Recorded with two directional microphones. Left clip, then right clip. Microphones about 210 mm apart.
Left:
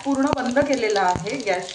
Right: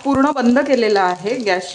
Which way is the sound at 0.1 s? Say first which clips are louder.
Right 6 dB; 55° right (ahead or behind).